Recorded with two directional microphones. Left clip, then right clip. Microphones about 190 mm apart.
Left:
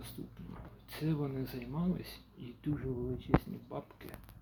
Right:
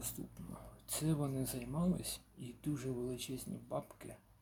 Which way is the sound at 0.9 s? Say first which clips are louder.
Left 1 dB; 10° right (ahead or behind).